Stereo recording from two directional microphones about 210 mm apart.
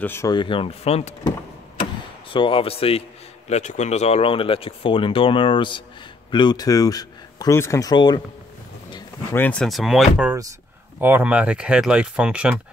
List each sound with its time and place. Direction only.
0.0 s speech: 10° left (ahead or behind); by 1.3 s 30° left (ahead or behind)
2.3 s speech: 25° left (ahead or behind)
9.3 s speech: 5° left (ahead or behind)